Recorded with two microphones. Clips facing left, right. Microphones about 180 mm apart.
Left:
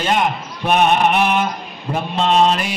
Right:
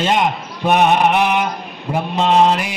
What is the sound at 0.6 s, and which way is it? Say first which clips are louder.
Mantra: right 1 dB; 15° right (ahead or behind).